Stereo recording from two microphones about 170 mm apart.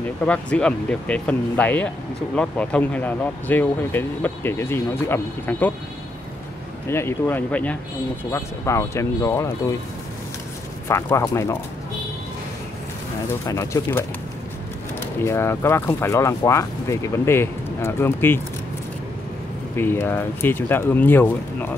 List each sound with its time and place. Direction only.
0.0 s speech: 5° left (ahead or behind)
6.9 s speech: 15° left (ahead or behind)
10.9 s speech: 15° left (ahead or behind)
13.5 s speech: 15° left (ahead or behind)
15.2 s speech: 15° left (ahead or behind)
19.7 s speech: 15° left (ahead or behind)